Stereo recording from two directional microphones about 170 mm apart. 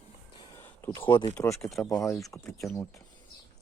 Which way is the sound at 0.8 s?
15° left (ahead or behind).